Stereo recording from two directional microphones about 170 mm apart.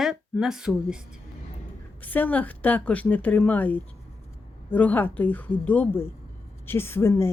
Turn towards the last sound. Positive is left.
turn(degrees=15)  # may be behind; listen again after turning